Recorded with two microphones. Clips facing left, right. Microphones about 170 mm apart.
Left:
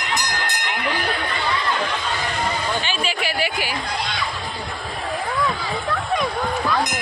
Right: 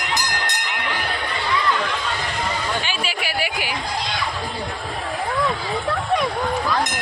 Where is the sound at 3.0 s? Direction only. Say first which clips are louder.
Left 2 dB; 10° right (ahead or behind).